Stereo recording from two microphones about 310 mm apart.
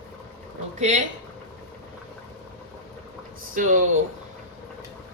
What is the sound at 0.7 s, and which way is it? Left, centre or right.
Speech, right.